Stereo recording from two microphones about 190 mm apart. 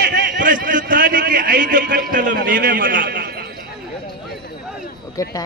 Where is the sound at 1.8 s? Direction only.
65° right (ahead or behind).